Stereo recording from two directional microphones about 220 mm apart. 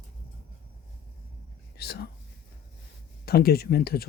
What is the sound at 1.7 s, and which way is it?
Speech, 45° left (ahead or behind).